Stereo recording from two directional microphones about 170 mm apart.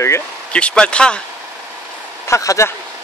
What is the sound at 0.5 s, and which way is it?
Speech, 5° left (ahead or behind).